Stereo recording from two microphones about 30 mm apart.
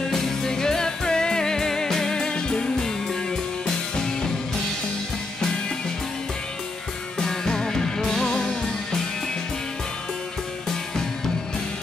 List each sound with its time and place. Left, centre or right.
0.0 s music: centre
7.2 s music: centre